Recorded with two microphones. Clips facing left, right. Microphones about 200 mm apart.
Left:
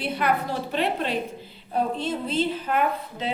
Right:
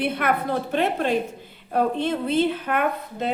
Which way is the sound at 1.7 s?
60° right (ahead or behind).